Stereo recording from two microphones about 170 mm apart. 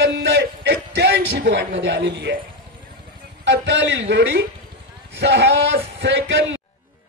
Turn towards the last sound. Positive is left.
turn(degrees=-90)